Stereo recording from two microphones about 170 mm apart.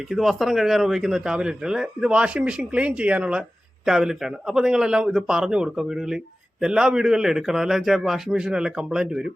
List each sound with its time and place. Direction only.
0.1 s a man's voice: centre (ahead or behind)